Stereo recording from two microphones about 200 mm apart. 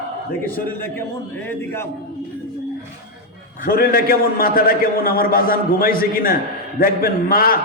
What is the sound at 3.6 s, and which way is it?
A man's voice, 45° left (ahead or behind).